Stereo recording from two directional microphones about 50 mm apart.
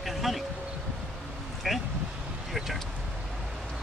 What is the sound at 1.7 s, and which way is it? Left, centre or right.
Speech, centre.